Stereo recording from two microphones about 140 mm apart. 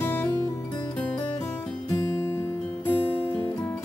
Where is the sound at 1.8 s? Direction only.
15° left (ahead or behind).